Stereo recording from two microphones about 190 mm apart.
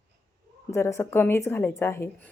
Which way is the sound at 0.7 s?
15° left (ahead or behind).